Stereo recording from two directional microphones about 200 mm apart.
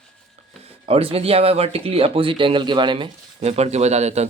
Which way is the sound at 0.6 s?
30° right (ahead or behind).